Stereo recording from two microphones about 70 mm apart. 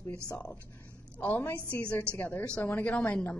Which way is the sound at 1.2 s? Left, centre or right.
Left.